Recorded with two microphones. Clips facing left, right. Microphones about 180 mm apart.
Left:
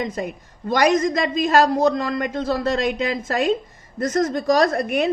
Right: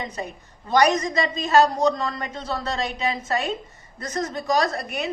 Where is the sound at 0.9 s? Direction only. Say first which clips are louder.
Left 5 dB; 55° left (ahead or behind).